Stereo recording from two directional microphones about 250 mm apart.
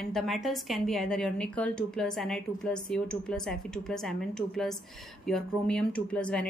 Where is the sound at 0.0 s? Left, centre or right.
Centre.